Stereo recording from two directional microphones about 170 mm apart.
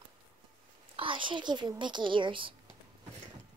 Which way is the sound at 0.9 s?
30° right (ahead or behind).